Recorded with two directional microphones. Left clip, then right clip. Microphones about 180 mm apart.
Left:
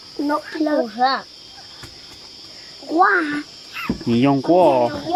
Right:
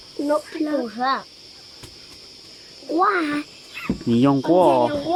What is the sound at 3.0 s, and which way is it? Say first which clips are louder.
Speech: left 4 dB; 15° right (ahead or behind).